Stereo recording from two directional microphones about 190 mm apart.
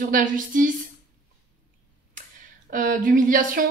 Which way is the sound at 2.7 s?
45° right (ahead or behind).